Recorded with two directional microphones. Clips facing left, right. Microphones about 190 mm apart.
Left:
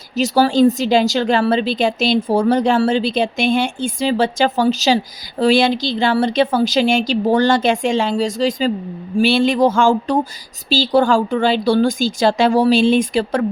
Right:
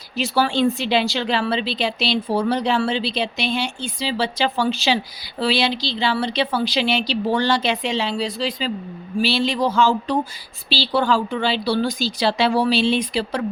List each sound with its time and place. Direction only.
0.2 s speech: 40° left (ahead or behind)